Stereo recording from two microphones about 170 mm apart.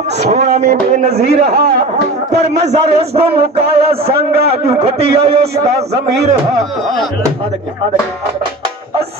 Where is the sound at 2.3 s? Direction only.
40° right (ahead or behind).